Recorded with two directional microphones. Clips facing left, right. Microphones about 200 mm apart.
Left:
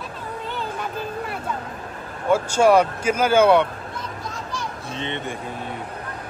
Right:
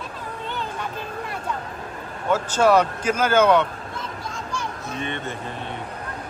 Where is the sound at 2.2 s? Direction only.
10° left (ahead or behind).